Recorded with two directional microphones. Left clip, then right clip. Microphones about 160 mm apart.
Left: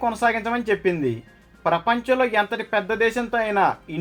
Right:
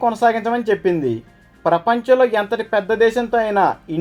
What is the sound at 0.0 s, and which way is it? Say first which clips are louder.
Speech: right 5 dB; 30° right (ahead or behind).